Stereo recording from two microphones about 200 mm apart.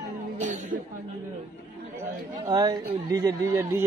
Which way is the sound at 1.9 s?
15° right (ahead or behind).